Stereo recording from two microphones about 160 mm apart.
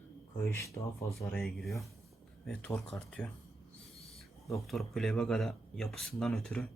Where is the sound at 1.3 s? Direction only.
Centre (ahead or behind).